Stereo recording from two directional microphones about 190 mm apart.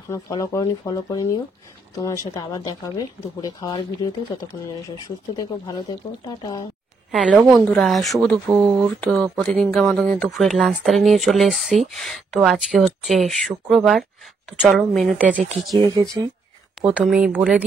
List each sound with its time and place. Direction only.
0.1 s speech: 15° left (ahead or behind)
7.1 s speech: centre (ahead or behind)
15.8 s speech: 20° right (ahead or behind)
16.8 s speech: 5° right (ahead or behind)